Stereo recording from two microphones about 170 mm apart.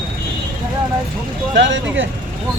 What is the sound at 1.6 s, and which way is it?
Speech, 90° right.